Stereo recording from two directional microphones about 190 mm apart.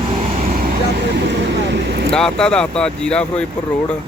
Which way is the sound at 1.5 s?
65° right (ahead or behind).